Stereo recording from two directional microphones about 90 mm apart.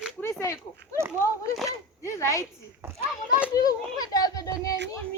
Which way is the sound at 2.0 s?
35° left (ahead or behind).